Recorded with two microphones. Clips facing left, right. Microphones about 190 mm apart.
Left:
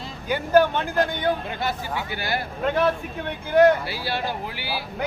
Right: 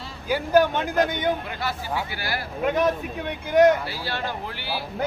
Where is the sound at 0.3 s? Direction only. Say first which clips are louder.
Left 1 dB; 10° right (ahead or behind).